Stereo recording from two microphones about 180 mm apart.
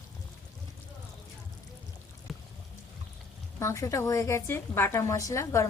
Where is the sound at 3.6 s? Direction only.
15° left (ahead or behind).